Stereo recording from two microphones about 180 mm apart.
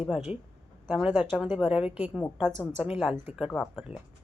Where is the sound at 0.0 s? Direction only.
5° right (ahead or behind).